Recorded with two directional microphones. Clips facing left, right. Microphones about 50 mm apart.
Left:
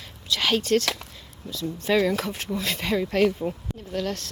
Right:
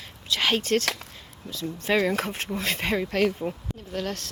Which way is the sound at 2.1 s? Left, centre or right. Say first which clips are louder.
Even; right.